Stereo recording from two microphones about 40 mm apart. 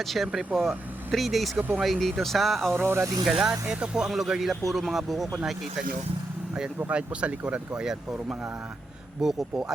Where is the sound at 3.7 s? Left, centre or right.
Right.